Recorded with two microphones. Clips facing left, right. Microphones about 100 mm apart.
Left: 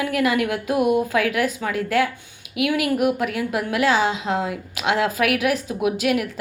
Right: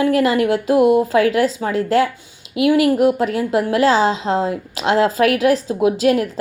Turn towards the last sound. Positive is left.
turn(degrees=-35)  # may be behind; listen again after turning